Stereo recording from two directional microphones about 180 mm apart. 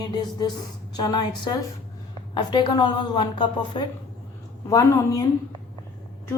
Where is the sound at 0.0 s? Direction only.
25° left (ahead or behind).